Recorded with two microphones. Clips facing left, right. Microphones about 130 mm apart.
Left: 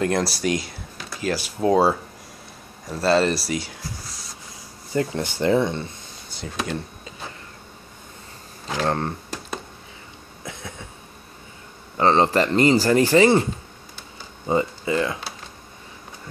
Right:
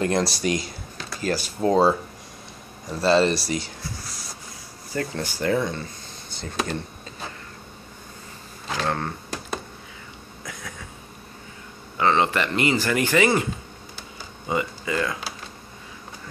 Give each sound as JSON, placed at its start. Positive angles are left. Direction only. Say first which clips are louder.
{"t": 0.0, "sound": "speech", "louder": "left 1 dB", "side_deg": 0}
{"t": 4.9, "sound": "speech", "louder": "left 4 dB", "side_deg": 20}
{"t": 6.4, "sound": "speech", "louder": "even", "side_deg": 10}
{"t": 8.8, "sound": "speech", "louder": "left 3 dB", "side_deg": 30}
{"t": 10.4, "sound": "cough", "louder": "left 2 dB", "side_deg": 25}
{"t": 12.0, "sound": "speech", "louder": "left 3 dB", "side_deg": 35}
{"t": 14.5, "sound": "speech", "louder": "left 4 dB", "side_deg": 30}